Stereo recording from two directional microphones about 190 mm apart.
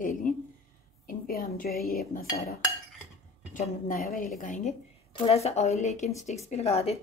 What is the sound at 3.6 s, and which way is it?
A woman's voice, 45° left (ahead or behind).